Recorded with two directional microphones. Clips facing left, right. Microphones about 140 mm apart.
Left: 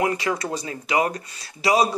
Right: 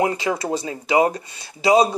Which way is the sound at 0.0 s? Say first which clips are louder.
Right 2 dB; 25° right (ahead or behind).